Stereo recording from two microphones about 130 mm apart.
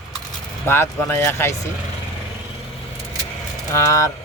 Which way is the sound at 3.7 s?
20° left (ahead or behind).